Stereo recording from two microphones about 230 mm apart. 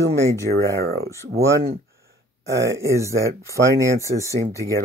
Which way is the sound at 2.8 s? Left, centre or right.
Centre.